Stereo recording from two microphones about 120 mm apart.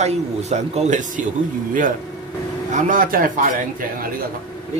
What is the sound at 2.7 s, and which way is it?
Speech, 90° right.